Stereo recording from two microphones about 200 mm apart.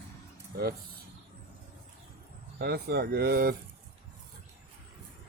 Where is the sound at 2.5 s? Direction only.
50° right (ahead or behind).